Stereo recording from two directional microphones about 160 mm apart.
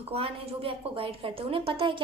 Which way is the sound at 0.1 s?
35° right (ahead or behind).